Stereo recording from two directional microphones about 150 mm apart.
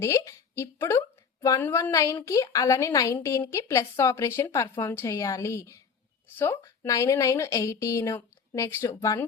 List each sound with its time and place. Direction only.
0.0 s a woman's voice: 20° left (ahead or behind)